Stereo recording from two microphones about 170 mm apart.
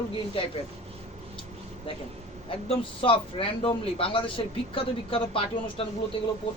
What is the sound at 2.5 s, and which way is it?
A man's voice, 35° left (ahead or behind).